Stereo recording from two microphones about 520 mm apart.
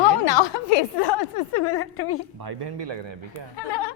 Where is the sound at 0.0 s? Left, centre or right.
Left.